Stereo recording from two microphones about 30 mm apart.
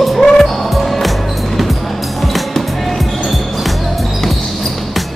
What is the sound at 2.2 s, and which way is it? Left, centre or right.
Basketball bounce, centre.